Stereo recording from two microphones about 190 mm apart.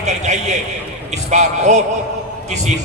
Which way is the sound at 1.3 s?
40° right (ahead or behind).